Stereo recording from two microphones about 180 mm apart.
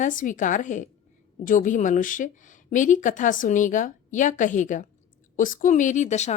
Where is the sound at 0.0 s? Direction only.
45° left (ahead or behind).